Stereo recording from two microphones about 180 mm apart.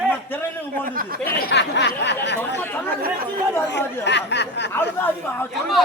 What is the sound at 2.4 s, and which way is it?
Speech, 10° left (ahead or behind).